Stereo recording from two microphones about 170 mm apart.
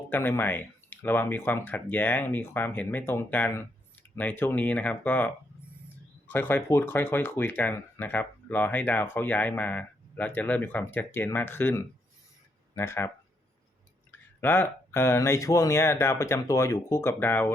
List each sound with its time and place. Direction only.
0.1 s speech: 10° left (ahead or behind)
14.4 s speech: 10° left (ahead or behind)